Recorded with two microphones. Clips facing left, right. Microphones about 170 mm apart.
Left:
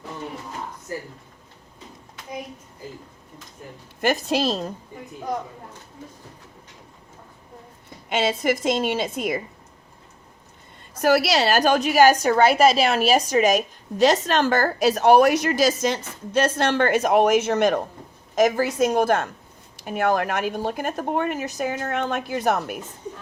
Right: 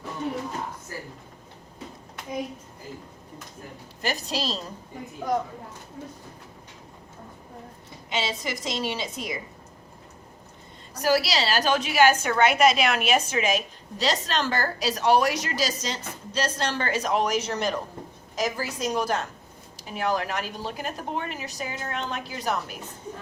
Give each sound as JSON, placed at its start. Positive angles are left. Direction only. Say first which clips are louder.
{"t": 4.0, "sound": "a woman's voice", "louder": "left 8 dB", "side_deg": 55}
{"t": 8.1, "sound": "a woman's voice", "louder": "left 8 dB", "side_deg": 55}
{"t": 11.0, "sound": "a woman's voice", "louder": "left 5 dB", "side_deg": 55}